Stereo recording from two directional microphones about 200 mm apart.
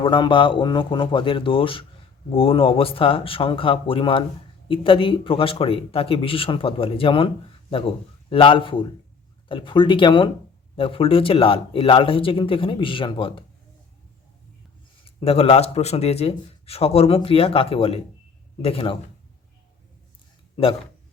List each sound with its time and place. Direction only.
0.0 s speech: 25° left (ahead or behind)
15.0 s speech: 30° left (ahead or behind)
20.6 s speech: 25° left (ahead or behind)